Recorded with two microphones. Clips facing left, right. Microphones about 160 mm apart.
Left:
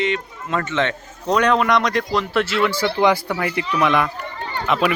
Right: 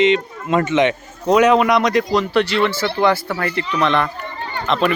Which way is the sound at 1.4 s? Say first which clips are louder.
Right 3 dB; 5° right (ahead or behind).